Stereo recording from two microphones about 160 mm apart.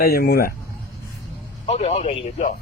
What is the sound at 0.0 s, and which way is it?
Speech, 75° left (ahead or behind).